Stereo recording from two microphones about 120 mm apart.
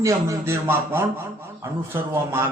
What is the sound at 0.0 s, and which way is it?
A man's voice, 25° right (ahead or behind).